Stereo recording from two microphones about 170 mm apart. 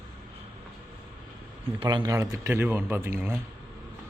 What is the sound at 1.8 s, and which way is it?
Speech, 25° right (ahead or behind).